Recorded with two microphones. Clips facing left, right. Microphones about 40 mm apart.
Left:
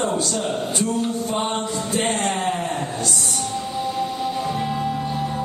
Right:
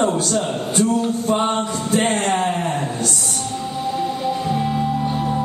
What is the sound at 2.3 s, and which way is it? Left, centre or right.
Speech, right.